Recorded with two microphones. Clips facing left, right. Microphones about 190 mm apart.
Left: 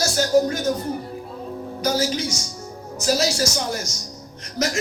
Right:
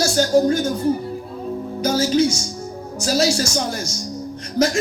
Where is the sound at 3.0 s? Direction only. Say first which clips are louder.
Right 2 dB; 30° right (ahead or behind).